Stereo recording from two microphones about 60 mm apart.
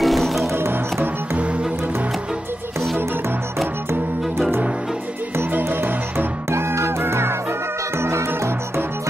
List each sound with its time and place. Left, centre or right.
0.0 s music: centre
0.6 s music: right
5.4 s music: right